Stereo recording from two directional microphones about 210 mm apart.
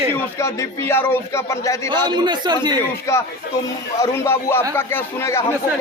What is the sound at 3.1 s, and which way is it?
A man's voice, 15° left (ahead or behind).